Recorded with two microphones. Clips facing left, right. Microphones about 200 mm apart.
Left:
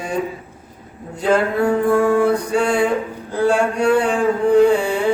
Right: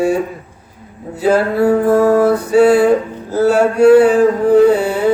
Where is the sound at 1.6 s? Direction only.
40° right (ahead or behind).